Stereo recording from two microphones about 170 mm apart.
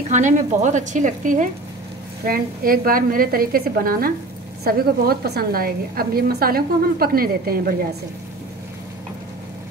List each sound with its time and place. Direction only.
0.1 s a woman's voice: 45° right (ahead or behind); by 7.5 s 60° right (ahead or behind)